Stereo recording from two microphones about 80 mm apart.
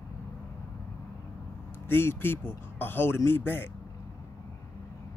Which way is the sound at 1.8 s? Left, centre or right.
Left.